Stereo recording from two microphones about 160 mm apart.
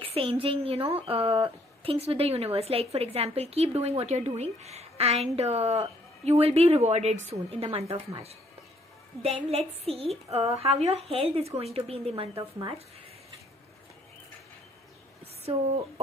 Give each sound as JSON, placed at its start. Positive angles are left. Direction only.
{"t": 0.0, "sound": "speech", "side_deg": -35}
{"t": 9.2, "sound": "speech", "side_deg": -40}
{"t": 15.5, "sound": "speech", "side_deg": -40}